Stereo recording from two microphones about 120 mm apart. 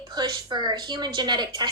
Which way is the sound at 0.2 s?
35° right (ahead or behind).